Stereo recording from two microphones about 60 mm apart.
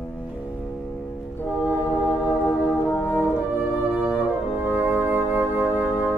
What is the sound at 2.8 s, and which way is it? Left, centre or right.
Brass instrument, left.